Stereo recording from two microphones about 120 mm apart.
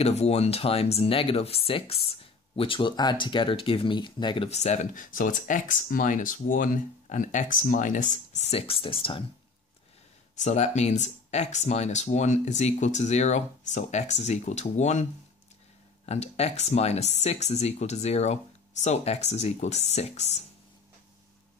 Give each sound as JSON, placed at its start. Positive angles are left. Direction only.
{"t": 0.0, "sound": "speech", "side_deg": 60}
{"t": 4.5, "sound": "speech", "side_deg": 65}
{"t": 10.3, "sound": "speech", "side_deg": 75}
{"t": 16.1, "sound": "speech", "side_deg": 60}